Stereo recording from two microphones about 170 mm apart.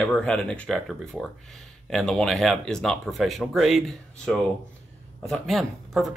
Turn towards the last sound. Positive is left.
turn(degrees=0)  # may be behind; listen again after turning